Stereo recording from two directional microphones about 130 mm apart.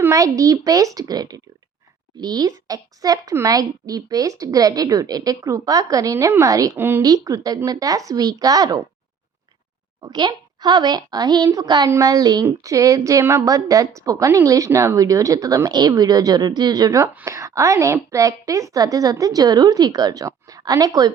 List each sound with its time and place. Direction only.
0.0 s speech: 25° right (ahead or behind)
10.0 s a child's voice: 30° right (ahead or behind)